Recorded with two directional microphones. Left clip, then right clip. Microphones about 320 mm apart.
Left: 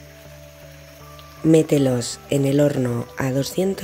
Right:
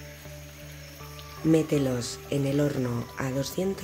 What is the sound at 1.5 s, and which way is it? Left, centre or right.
Speech, left.